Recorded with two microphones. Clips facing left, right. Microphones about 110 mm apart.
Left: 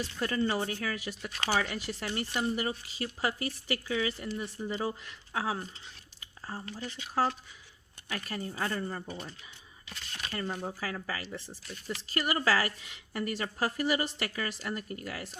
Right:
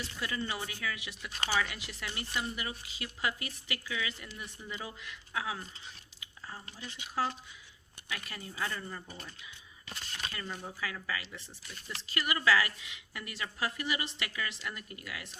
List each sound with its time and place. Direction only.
0.2 s speech: 45° left (ahead or behind)
9.0 s speech: 30° left (ahead or behind)
10.3 s speech: 40° left (ahead or behind)